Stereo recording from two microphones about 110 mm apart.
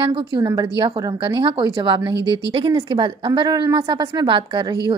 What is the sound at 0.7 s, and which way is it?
A woman's voice, 50° right (ahead or behind).